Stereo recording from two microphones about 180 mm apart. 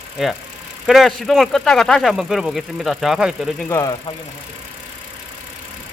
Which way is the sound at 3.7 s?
20° left (ahead or behind).